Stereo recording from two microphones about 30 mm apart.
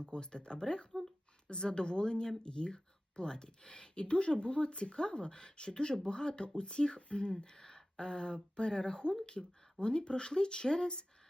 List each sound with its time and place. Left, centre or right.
0.0 s speech: left
3.9 s speech: left
7.4 s a sound: centre
7.9 s speech: left